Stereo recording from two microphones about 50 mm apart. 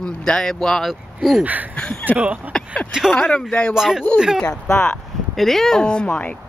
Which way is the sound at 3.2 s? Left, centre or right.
Left.